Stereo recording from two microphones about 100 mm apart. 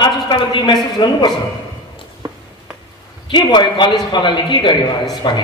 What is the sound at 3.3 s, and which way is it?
A man's voice, 45° left (ahead or behind).